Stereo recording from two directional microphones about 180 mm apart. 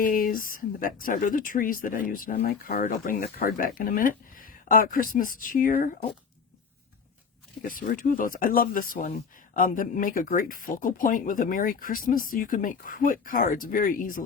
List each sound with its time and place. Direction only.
0.0 s speech: 50° left (ahead or behind)
7.6 s speech: 50° left (ahead or behind)